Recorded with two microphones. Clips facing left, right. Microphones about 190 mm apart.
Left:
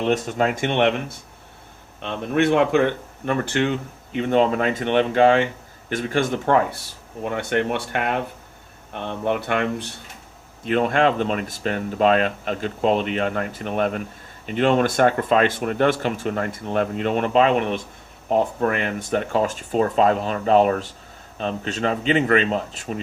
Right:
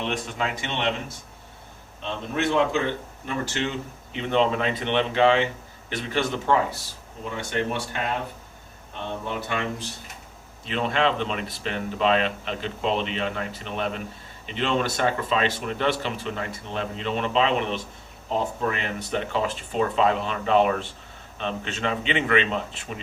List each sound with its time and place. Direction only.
0.0 s speech: 45° left (ahead or behind); by 9.9 s 60° left (ahead or behind)
10.7 s a man's voice: 50° left (ahead or behind)